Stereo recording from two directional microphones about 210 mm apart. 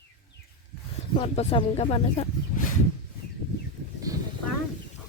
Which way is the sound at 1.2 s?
25° left (ahead or behind).